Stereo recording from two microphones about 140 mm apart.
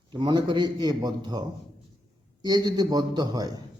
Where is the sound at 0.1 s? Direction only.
35° right (ahead or behind).